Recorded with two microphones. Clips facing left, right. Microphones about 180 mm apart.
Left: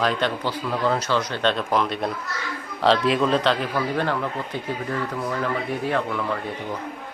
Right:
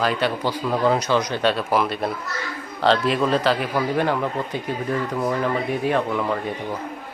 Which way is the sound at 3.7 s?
15° right (ahead or behind).